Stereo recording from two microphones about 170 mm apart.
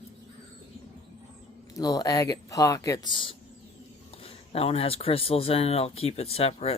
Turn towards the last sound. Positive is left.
turn(degrees=35)  # may be behind; listen again after turning